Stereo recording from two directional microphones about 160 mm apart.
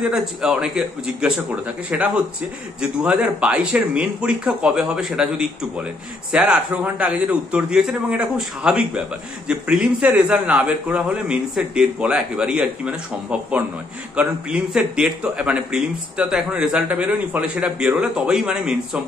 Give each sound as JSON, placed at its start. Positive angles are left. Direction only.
{"t": 0.1, "sound": "a man's voice", "side_deg": -5}